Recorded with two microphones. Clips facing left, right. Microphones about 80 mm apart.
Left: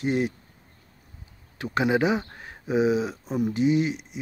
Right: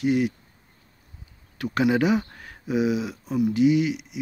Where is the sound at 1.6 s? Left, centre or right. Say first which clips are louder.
Right 1 dB; left.